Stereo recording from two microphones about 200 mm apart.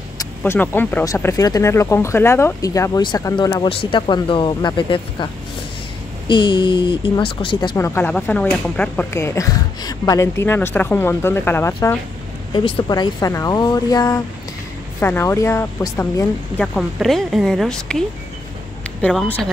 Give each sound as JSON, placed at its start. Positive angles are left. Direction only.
{"t": 0.2, "sound": "speech", "side_deg": 10}
{"t": 7.7, "sound": "speech", "side_deg": 10}
{"t": 12.5, "sound": "speech", "side_deg": 25}